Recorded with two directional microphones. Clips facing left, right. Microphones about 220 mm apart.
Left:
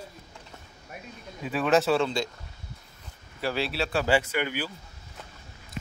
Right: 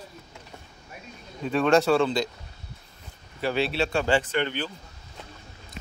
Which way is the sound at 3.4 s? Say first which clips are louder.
Right 3 dB; centre (ahead or behind).